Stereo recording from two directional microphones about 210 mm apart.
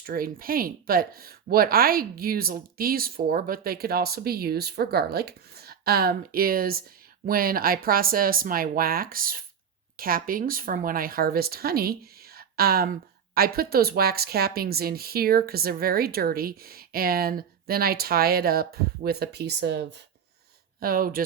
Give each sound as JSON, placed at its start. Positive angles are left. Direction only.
{"t": 0.0, "sound": "speech", "side_deg": -45}